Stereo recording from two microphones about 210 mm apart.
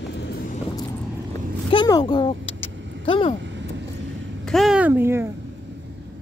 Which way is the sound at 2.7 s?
60° right (ahead or behind).